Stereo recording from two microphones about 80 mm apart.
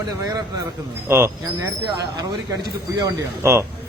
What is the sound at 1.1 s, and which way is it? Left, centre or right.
Speech, right.